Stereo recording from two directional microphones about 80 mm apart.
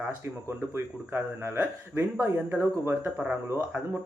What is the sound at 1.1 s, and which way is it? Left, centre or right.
Speech, right.